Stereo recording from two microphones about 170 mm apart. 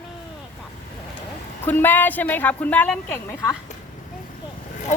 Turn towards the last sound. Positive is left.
turn(degrees=45)  # may be behind; listen again after turning